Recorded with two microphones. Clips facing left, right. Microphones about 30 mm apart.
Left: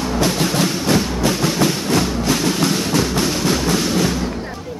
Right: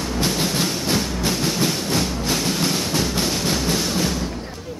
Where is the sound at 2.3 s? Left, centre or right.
Centre.